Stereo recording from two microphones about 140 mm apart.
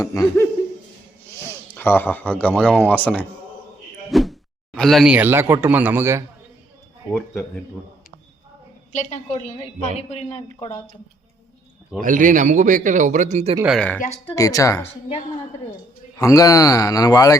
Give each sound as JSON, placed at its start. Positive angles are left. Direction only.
{"t": 0.0, "sound": "a man's voice", "side_deg": 20}
{"t": 1.7, "sound": "speech", "side_deg": 15}
{"t": 4.1, "sound": "a sound", "side_deg": 0}
{"t": 5.1, "sound": "speech", "side_deg": -15}
{"t": 8.9, "sound": "a woman's voice", "side_deg": 60}
{"t": 11.9, "sound": "speech", "side_deg": -70}
{"t": 13.7, "sound": "speech", "side_deg": 5}
{"t": 14.3, "sound": "a man's voice", "side_deg": 25}
{"t": 16.1, "sound": "a man's voice", "side_deg": 25}